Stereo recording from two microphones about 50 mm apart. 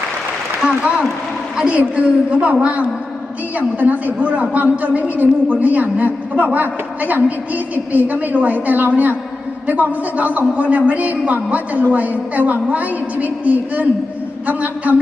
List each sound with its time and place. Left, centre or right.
1.7 s a woman's voice: right